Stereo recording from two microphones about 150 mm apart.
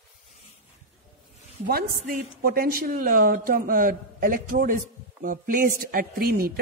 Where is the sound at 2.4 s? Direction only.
80° right.